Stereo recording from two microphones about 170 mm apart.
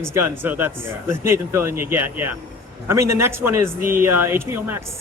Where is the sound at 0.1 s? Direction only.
15° right (ahead or behind).